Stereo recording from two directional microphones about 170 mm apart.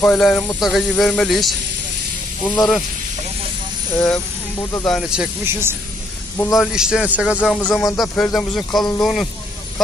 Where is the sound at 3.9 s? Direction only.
15° left (ahead or behind).